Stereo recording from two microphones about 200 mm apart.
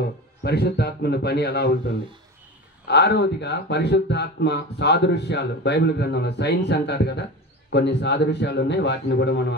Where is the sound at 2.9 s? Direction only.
55° left (ahead or behind).